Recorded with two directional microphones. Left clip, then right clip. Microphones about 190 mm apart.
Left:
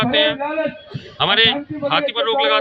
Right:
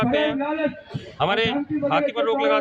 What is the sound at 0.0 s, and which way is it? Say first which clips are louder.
A man's voice: left 5 dB; 5° right (ahead or behind).